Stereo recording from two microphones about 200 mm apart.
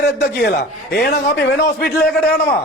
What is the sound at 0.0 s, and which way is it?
A man's voice, 55° left (ahead or behind).